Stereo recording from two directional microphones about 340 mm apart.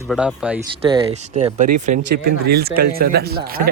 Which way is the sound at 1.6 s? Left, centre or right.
Right.